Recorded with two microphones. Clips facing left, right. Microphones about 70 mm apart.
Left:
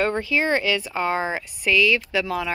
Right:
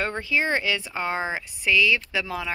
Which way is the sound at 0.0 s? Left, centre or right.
Centre.